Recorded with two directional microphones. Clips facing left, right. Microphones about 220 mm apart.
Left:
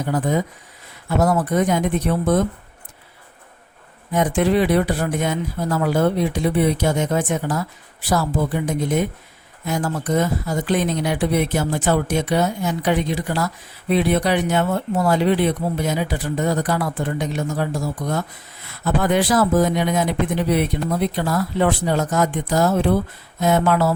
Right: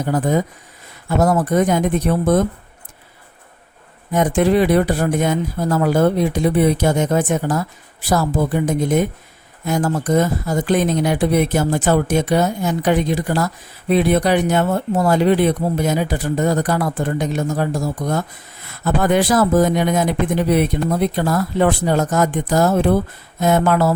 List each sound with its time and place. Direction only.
0.1 s speech: 45° right (ahead or behind)
4.1 s speech: 45° right (ahead or behind)